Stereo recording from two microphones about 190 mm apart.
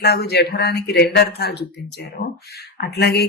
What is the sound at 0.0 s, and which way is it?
Speech, 55° left (ahead or behind).